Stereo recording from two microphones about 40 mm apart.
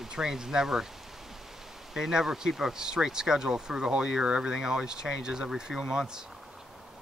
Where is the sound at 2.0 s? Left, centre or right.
Centre.